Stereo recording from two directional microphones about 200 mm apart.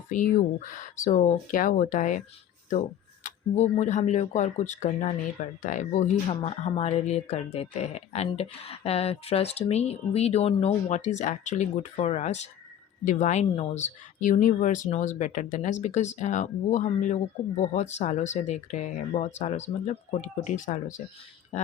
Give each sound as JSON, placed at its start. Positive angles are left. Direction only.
{"t": 0.1, "sound": "speech", "side_deg": 40}
{"t": 3.2, "sound": "speech", "side_deg": 35}
{"t": 21.5, "sound": "a sound", "side_deg": 35}